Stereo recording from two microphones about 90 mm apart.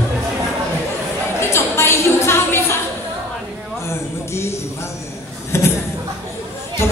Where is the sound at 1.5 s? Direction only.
30° left (ahead or behind).